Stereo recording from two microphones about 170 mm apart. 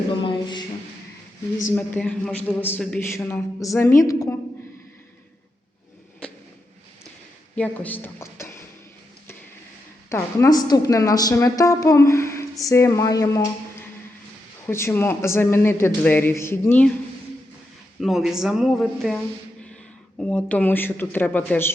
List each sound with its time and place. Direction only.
0.2 s a sound: 25° left (ahead or behind)
1.7 s a man's voice: 10° left (ahead or behind)
7.5 s a woman's voice: 10° left (ahead or behind)
10.1 s a woman's voice: 20° left (ahead or behind)
18.0 s a man's voice: centre (ahead or behind)